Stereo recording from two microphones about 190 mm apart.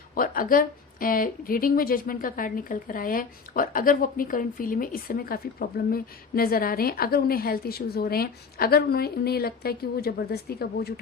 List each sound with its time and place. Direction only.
0.1 s speech: 50° left (ahead or behind)